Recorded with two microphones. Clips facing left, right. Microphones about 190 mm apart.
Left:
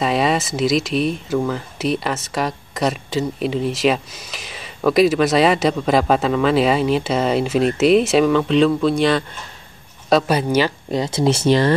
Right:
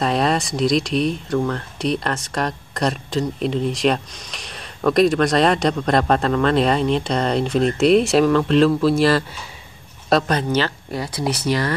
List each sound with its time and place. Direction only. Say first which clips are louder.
0.0 s speech: left 1 dB; centre (ahead or behind); by 11.7 s 25° left (ahead or behind)